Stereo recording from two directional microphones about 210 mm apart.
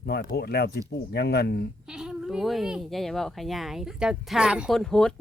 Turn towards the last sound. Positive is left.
turn(degrees=5)  # may be behind; listen again after turning